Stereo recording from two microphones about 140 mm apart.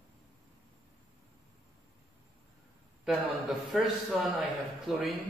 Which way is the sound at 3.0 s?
Centre (ahead or behind).